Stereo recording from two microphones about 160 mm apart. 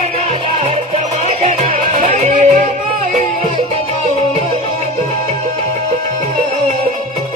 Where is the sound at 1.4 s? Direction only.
45° right (ahead or behind).